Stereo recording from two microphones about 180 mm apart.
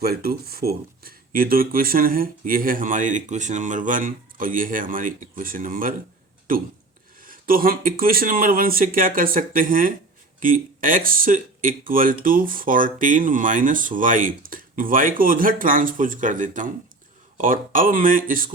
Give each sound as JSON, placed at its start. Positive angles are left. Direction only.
{"t": 0.0, "sound": "speech", "side_deg": -60}